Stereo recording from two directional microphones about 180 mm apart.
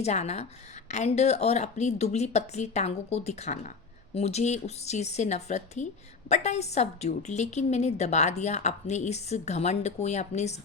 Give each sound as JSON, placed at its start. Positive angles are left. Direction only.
{"t": 0.0, "sound": "a woman's voice", "side_deg": 40}